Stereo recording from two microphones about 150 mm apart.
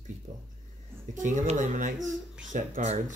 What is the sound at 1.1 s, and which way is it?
Speech, 55° right (ahead or behind).